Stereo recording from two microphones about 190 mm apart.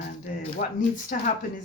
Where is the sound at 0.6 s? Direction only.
45° left (ahead or behind).